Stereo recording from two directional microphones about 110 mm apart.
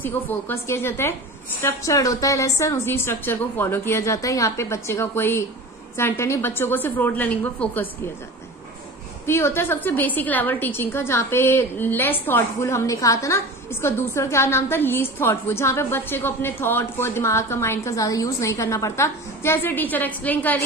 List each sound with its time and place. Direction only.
0.0 s a woman's voice: 20° left (ahead or behind)
9.2 s a woman's voice: 25° left (ahead or behind)